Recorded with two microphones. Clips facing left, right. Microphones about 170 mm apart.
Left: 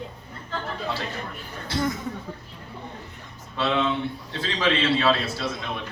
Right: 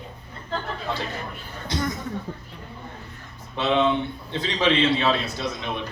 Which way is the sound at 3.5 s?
20° right (ahead or behind).